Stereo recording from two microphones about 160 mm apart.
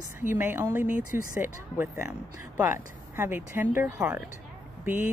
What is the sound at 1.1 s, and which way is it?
Speech, 55° left (ahead or behind).